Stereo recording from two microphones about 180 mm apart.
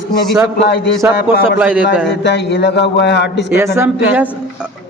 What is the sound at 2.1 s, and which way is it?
Speech, 70° left (ahead or behind).